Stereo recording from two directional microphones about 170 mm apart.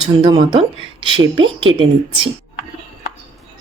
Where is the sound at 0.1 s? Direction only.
25° right (ahead or behind).